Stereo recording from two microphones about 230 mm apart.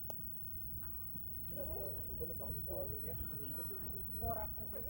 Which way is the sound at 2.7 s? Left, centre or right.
Right.